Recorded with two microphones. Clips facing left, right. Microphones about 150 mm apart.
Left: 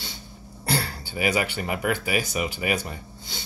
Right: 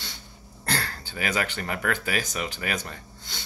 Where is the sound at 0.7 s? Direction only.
10° left (ahead or behind).